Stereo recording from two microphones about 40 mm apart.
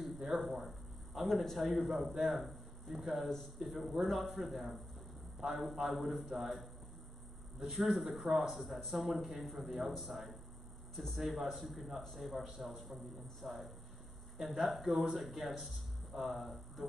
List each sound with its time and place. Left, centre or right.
0.0 s a sound: centre
1.4 s a man's voice: centre
5.4 s a man's voice: centre
5.8 s a man's voice: centre